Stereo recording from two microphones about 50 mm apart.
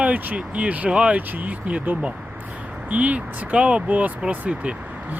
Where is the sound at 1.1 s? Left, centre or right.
Right.